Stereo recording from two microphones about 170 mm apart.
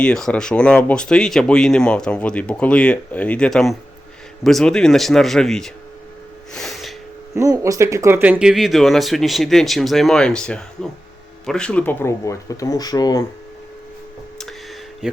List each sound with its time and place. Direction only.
0.0 s speech: 5° left (ahead or behind)
6.5 s gasp: centre (ahead or behind)
7.3 s speech: 20° right (ahead or behind); by 13.2 s 20° left (ahead or behind)
15.0 s speech: 5° right (ahead or behind)